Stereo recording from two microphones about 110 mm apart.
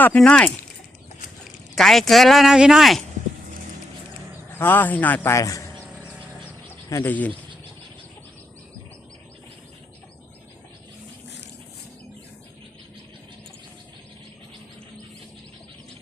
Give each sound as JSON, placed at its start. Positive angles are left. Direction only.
{"t": 0.2, "sound": "speech", "side_deg": 10}
{"t": 1.7, "sound": "speech", "side_deg": 0}
{"t": 4.5, "sound": "speech", "side_deg": 20}
{"t": 5.3, "sound": "a man's voice", "side_deg": 30}
{"t": 7.0, "sound": "speech", "side_deg": 15}